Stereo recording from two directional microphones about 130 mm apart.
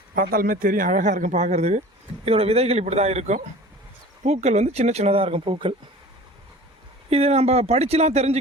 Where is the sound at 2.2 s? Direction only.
50° right (ahead or behind).